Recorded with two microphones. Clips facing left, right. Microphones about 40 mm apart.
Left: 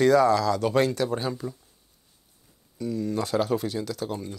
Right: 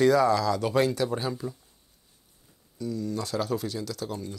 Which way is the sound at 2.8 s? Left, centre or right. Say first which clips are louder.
Left 3 dB; left.